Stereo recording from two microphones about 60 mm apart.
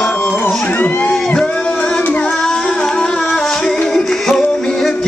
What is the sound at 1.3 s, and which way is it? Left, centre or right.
Music, centre.